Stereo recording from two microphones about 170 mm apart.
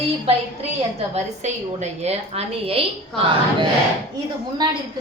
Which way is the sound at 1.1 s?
40° right (ahead or behind).